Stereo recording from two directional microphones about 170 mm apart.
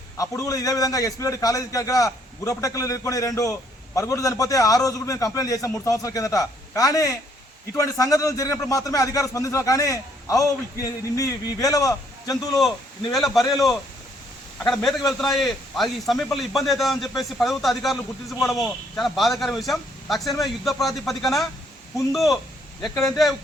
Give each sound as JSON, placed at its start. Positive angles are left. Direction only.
{"t": 0.2, "sound": "a man's voice", "side_deg": 20}
{"t": 13.1, "sound": "a man's voice", "side_deg": 0}
{"t": 22.8, "sound": "a man's voice", "side_deg": 0}